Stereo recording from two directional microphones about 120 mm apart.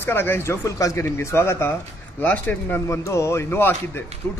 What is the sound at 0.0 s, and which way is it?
A man's voice, 20° left (ahead or behind).